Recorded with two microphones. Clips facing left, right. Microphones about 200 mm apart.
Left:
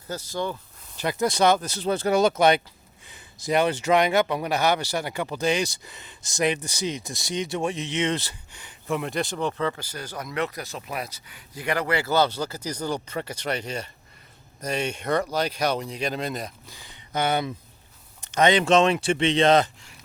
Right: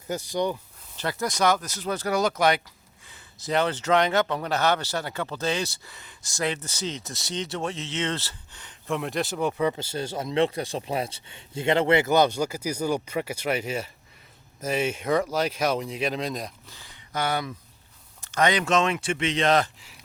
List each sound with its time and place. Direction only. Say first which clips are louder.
0.3 s speech: right 3 dB; 15° right (ahead or behind)
0.9 s a man's voice: left 4 dB; 15° left (ahead or behind)
1.3 s speech: left 2 dB; 25° left (ahead or behind)
3.1 s a man's voice: left 3 dB; 15° left (ahead or behind)
16.6 s a sound: left 2 dB; 15° left (ahead or behind)
18.2 s speech: left 3 dB; 20° left (ahead or behind)